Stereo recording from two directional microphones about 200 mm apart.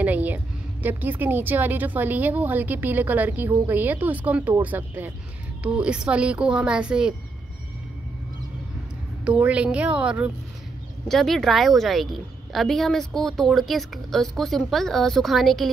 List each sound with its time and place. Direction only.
0.0 s a sound: 10° right (ahead or behind)
0.8 s a woman's voice: 10° right (ahead or behind)
9.2 s a woman's voice: 5° right (ahead or behind)